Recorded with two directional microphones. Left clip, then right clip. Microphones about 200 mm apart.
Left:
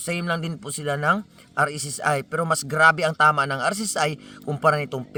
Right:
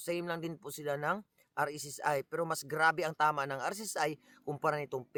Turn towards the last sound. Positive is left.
turn(degrees=-45)  # may be behind; listen again after turning